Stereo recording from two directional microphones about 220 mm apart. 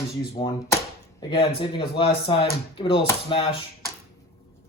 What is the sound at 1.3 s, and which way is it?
A man's voice, 25° left (ahead or behind).